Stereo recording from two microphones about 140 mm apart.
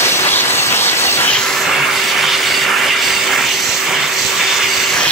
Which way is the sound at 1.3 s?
5° left (ahead or behind).